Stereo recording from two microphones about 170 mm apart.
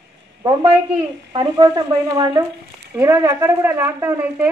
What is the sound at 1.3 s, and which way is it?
Speech, 25° right (ahead or behind).